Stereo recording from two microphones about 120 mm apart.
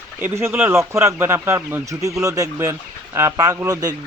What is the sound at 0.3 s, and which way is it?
Speech, 20° right (ahead or behind).